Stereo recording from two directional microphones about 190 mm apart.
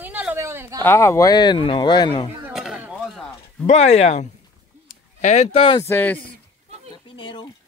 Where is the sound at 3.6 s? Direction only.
35° left (ahead or behind).